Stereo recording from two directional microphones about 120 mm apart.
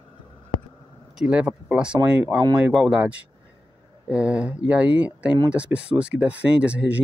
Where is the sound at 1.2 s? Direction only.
10° right (ahead or behind).